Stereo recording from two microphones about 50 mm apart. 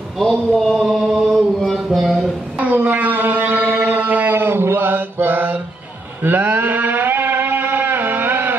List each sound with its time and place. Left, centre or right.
0.2 s speech: centre
0.7 s chant: centre
1.9 s speech: centre
2.6 s a sound: right